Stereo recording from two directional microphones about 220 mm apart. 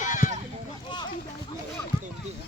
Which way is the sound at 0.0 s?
35° left (ahead or behind).